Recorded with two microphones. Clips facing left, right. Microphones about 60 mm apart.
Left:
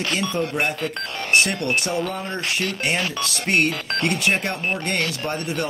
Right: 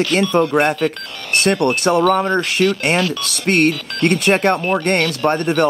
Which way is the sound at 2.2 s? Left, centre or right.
Right.